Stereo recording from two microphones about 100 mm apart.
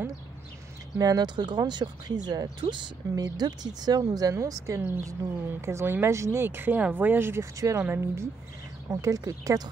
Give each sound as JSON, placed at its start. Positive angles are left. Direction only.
{"t": 0.9, "sound": "speech", "side_deg": -40}